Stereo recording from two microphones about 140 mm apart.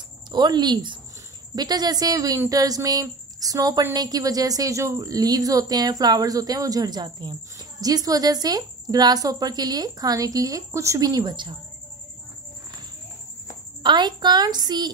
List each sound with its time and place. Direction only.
0.3 s a woman's voice: 30° right (ahead or behind)
13.8 s a woman's voice: 35° right (ahead or behind)